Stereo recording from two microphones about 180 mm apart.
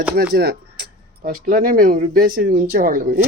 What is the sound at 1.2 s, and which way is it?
Speech, 50° right (ahead or behind).